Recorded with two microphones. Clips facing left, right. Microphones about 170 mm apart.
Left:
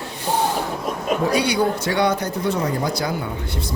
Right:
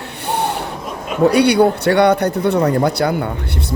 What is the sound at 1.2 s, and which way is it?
Speech, 65° right (ahead or behind).